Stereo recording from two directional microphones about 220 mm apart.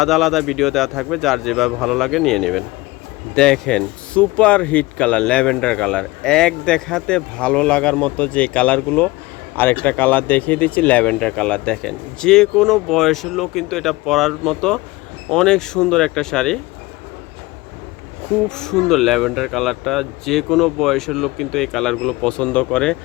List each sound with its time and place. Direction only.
0.0 s speech: centre (ahead or behind)
18.4 s speech: 5° left (ahead or behind)